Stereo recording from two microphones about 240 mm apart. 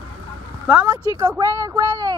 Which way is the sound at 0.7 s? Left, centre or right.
Centre.